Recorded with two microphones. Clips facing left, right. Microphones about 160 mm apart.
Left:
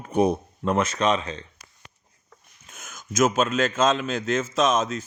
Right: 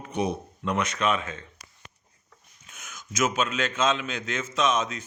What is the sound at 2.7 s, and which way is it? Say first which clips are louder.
A man's voice: left 7 dB; 45° left (ahead or behind).